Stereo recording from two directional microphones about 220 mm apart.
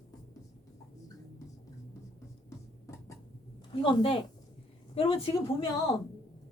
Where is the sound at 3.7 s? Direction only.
25° left (ahead or behind).